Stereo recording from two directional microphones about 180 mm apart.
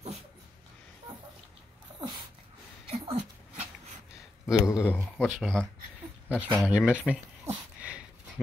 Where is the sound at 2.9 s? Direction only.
35° right (ahead or behind).